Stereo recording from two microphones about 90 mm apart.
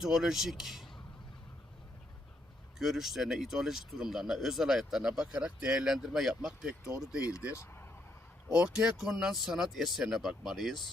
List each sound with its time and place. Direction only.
0.0 s speech: 5° right (ahead or behind)
2.7 s speech: 5° right (ahead or behind)
7.5 s speech: 30° left (ahead or behind)
8.4 s speech: 10° right (ahead or behind)